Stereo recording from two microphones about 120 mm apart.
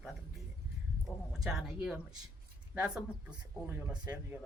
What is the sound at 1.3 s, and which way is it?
Speech, 5° right (ahead or behind).